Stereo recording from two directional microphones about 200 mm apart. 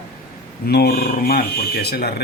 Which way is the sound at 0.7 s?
50° left (ahead or behind).